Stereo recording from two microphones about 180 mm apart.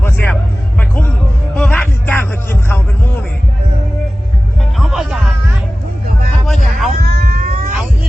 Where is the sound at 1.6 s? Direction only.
5° left (ahead or behind).